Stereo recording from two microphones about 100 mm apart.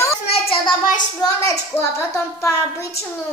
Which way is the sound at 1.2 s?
35° left (ahead or behind).